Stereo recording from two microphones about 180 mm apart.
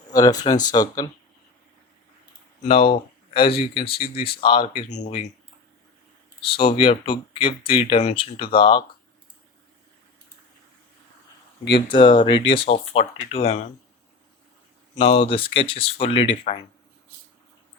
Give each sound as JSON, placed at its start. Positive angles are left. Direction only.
{"t": 0.1, "sound": "speech", "side_deg": 20}
{"t": 2.6, "sound": "speech", "side_deg": 30}
{"t": 4.9, "sound": "speech", "side_deg": 40}
{"t": 6.6, "sound": "speech", "side_deg": 30}
{"t": 11.9, "sound": "speech", "side_deg": 25}
{"t": 14.9, "sound": "speech", "side_deg": 30}